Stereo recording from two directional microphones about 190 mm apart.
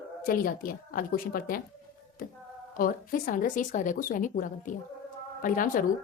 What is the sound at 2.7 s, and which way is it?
A woman's voice, 50° left (ahead or behind).